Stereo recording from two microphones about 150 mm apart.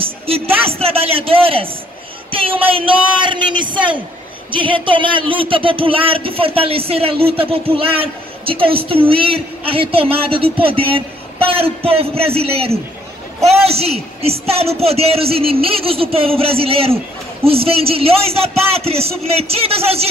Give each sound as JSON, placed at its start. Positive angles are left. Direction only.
{"t": 0.6, "sound": "speech", "side_deg": -40}